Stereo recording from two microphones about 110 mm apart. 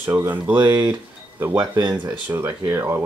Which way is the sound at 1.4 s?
10° right (ahead or behind).